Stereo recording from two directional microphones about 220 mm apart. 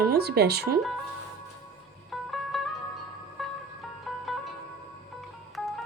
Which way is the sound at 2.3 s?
Centre (ahead or behind).